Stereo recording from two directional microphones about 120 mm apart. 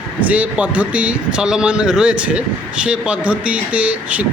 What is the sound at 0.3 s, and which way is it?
Speech, 10° right (ahead or behind).